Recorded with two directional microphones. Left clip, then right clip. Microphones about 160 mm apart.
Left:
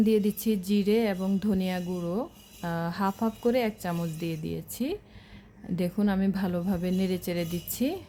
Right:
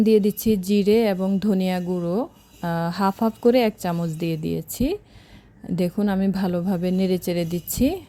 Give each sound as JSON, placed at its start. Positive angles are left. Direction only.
{"t": 0.0, "sound": "speech", "side_deg": -35}